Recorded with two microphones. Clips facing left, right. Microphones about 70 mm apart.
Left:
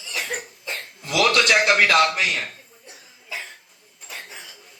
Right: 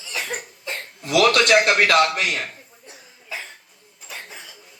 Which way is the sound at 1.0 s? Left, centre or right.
Right.